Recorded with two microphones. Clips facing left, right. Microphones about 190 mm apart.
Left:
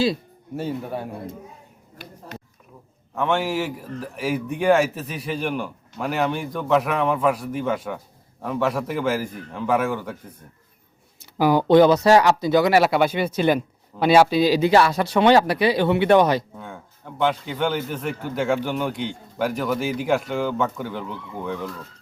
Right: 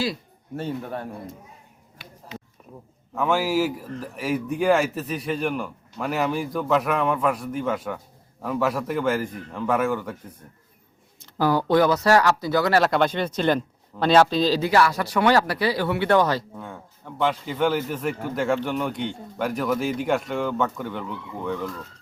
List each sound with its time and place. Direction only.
0.5 s a man's voice: 5° left (ahead or behind)
3.2 s a man's voice: 5° right (ahead or behind)
11.2 s speech: 15° left (ahead or behind)
14.7 s speech: 25° left (ahead or behind)
16.6 s a man's voice: centre (ahead or behind)